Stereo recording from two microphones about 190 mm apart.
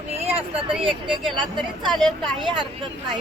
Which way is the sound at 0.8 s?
25° right (ahead or behind).